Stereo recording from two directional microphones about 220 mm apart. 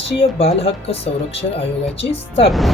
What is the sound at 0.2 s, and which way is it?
Speech, 25° left (ahead or behind).